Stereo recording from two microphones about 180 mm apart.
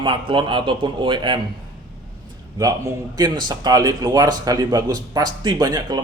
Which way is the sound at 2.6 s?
20° right (ahead or behind).